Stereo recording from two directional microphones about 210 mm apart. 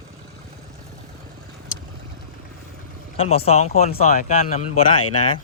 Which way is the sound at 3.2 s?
30° left (ahead or behind).